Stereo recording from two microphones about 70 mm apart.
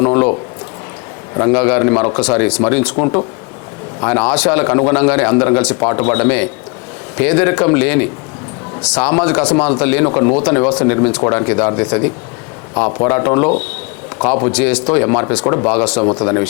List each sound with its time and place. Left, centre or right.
0.0 s a man's voice: left
1.5 s a man's voice: centre
3.0 s a man's voice: left
4.0 s a man's voice: centre